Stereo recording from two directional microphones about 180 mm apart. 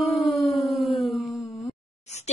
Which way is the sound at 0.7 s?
Centre (ahead or behind).